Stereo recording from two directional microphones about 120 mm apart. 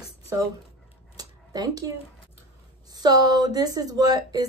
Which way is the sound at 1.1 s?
30° right (ahead or behind).